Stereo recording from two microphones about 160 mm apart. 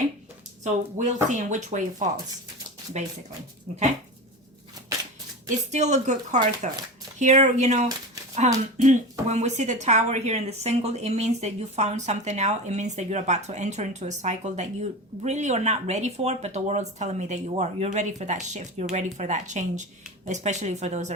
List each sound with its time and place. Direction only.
0.6 s speech: 50° right (ahead or behind)
5.5 s speech: 45° right (ahead or behind)